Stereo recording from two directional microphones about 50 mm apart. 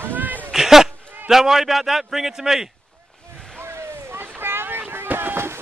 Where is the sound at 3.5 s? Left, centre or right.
Right.